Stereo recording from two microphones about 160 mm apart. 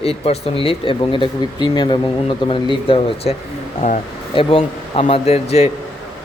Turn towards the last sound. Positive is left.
turn(degrees=40)  # may be behind; listen again after turning